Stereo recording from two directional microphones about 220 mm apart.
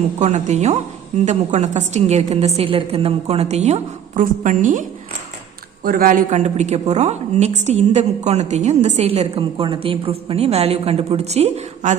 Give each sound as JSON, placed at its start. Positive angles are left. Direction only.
{"t": 0.2, "sound": "a woman's voice", "side_deg": -30}